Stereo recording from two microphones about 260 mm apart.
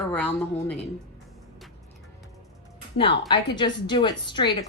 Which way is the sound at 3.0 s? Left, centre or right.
Centre.